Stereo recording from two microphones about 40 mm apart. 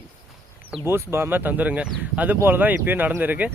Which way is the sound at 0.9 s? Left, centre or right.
Right.